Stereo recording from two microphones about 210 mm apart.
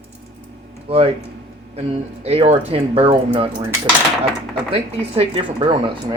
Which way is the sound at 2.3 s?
30° right (ahead or behind).